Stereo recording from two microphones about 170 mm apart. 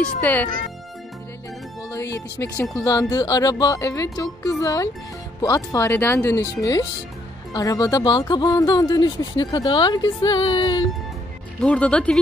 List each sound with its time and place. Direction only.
0.0 s speech: 10° left (ahead or behind)
2.1 s speech: 20° left (ahead or behind)
11.6 s speech: 5° left (ahead or behind)